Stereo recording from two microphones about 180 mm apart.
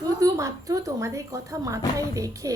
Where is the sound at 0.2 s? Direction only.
20° right (ahead or behind).